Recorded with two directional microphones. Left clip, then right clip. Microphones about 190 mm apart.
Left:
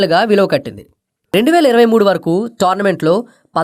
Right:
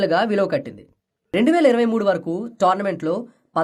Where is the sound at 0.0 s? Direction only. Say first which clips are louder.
Left 7 dB; 35° left (ahead or behind).